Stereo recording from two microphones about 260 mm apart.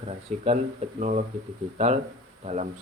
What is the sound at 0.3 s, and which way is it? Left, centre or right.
Speech, right.